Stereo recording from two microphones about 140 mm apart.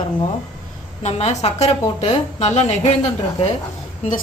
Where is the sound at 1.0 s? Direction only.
50° left (ahead or behind).